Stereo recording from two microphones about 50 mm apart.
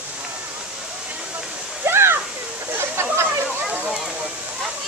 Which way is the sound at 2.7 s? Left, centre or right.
Right.